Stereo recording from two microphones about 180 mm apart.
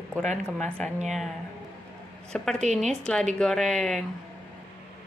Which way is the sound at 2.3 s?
5° left (ahead or behind).